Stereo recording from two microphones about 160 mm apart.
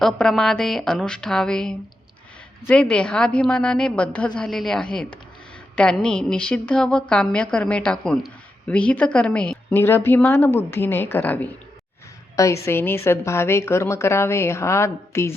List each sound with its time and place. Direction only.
0.0 s a woman's voice: 5° left (ahead or behind)
12.6 s a woman's voice: 15° left (ahead or behind)